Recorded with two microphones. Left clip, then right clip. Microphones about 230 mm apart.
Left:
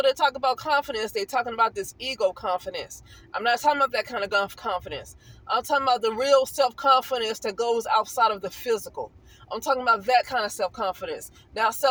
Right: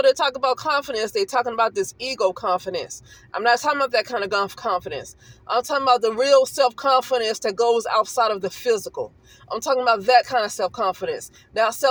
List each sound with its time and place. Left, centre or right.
0.0 s speech: right